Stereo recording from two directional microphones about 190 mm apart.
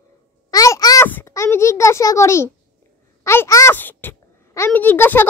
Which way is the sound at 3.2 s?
15° left (ahead or behind).